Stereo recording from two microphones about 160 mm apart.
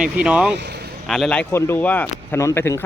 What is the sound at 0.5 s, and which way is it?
Speech, 90° right.